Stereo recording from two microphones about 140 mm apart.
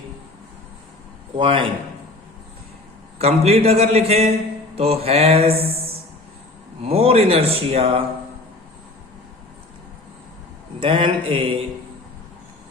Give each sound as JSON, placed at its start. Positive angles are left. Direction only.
{"t": 1.4, "sound": "mantra", "side_deg": -35}
{"t": 3.2, "sound": "speech", "side_deg": -45}
{"t": 10.8, "sound": "mantra", "side_deg": -40}